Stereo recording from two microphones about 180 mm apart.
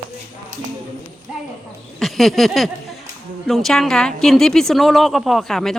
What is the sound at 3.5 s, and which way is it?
A woman's voice, centre (ahead or behind).